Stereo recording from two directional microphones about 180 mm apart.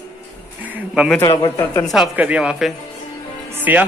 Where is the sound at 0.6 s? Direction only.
5° right (ahead or behind).